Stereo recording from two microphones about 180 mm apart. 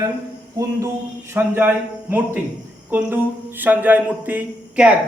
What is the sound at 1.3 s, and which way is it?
A man's voice, 10° right (ahead or behind).